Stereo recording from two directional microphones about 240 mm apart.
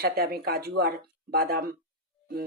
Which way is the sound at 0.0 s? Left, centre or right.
Right.